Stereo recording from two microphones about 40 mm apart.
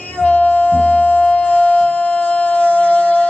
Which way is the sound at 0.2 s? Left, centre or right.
Left.